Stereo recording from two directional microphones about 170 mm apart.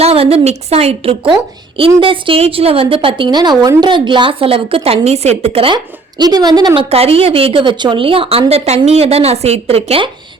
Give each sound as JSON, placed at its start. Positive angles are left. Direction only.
{"t": 0.0, "sound": "a woman's voice", "side_deg": -35}
{"t": 6.9, "sound": "a woman's voice", "side_deg": -35}